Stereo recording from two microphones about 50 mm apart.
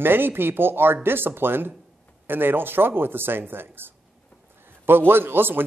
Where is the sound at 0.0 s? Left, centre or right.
Right.